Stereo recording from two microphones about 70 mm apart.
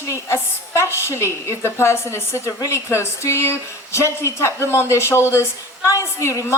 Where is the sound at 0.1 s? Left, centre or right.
Left.